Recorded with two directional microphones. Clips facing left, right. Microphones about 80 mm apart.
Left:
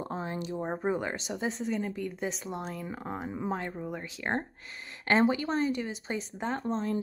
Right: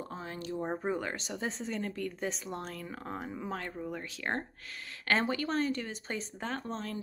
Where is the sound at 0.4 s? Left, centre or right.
Centre.